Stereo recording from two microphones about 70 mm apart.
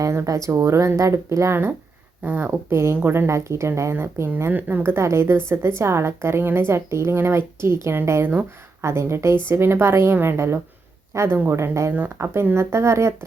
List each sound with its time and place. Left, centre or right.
0.0 s speech: right
2.2 s speech: right
2.5 s a woman's voice: right